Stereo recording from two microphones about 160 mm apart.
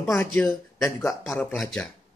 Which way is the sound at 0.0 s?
15° left (ahead or behind).